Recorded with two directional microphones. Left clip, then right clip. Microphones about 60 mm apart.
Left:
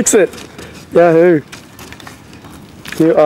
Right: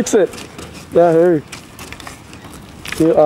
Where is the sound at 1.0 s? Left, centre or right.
Left.